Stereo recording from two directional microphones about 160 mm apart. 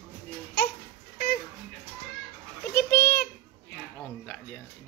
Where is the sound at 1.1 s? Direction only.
70° left (ahead or behind).